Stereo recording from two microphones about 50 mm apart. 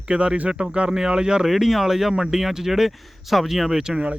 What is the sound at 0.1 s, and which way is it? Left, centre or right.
Speech, right.